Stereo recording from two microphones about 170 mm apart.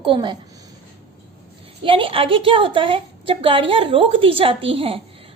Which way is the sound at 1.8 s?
30° right (ahead or behind).